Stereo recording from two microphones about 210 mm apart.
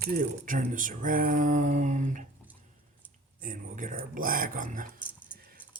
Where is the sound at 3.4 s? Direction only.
40° right (ahead or behind).